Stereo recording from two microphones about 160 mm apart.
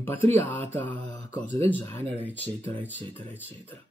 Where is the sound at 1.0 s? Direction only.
50° left (ahead or behind).